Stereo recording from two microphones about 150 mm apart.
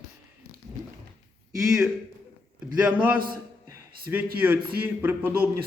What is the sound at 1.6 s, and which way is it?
Speech, 5° right (ahead or behind).